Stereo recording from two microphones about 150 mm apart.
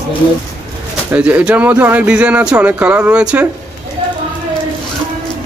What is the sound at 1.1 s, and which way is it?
Speech, 10° right (ahead or behind).